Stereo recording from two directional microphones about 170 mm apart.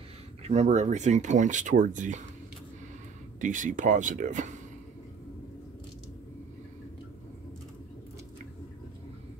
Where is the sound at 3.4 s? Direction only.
50° right (ahead or behind).